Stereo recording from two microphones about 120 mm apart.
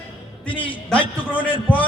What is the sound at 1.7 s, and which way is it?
Speech, 15° left (ahead or behind).